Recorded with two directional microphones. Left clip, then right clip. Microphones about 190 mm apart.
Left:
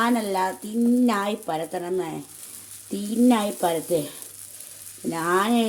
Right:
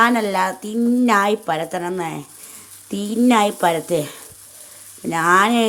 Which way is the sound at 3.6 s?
10° right (ahead or behind).